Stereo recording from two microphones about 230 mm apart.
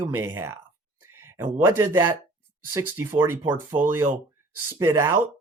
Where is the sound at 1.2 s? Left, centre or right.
Centre.